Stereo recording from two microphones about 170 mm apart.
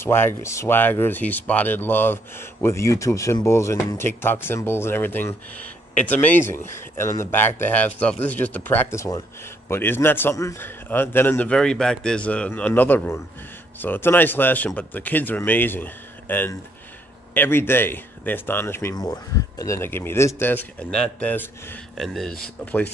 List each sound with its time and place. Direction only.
0.0 s speech: 15° left (ahead or behind)